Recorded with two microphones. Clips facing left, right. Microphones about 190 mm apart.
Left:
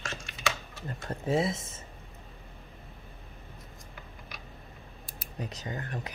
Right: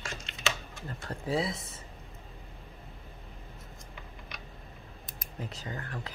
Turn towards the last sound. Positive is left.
turn(degrees=20)  # may be behind; listen again after turning